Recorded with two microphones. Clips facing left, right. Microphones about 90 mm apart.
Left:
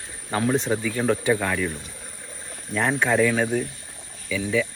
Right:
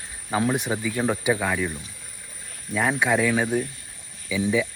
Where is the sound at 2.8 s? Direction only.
5° right (ahead or behind).